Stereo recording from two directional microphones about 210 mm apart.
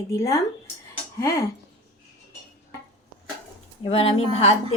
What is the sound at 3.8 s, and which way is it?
Speech, 25° left (ahead or behind).